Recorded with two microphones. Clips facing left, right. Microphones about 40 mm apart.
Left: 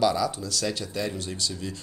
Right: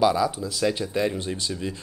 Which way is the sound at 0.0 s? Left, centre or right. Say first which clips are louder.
Right 3 dB; centre.